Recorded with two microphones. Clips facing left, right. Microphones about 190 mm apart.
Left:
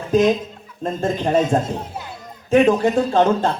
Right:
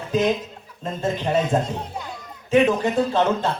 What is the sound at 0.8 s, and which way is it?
Speech, 45° left (ahead or behind).